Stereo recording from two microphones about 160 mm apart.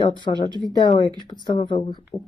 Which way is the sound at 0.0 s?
25° left (ahead or behind).